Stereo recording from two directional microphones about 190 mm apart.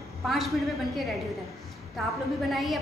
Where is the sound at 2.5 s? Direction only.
Centre (ahead or behind).